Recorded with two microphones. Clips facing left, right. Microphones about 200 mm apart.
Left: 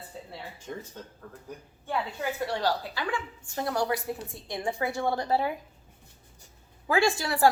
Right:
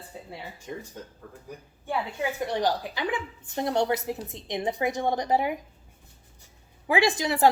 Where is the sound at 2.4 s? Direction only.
20° right (ahead or behind).